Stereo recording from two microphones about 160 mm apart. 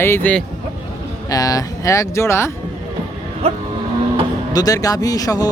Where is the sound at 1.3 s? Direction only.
20° left (ahead or behind).